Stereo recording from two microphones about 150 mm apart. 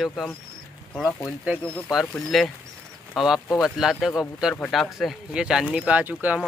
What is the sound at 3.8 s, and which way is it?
Speech, centre (ahead or behind).